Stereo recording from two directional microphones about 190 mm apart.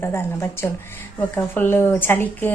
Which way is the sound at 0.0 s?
15° left (ahead or behind).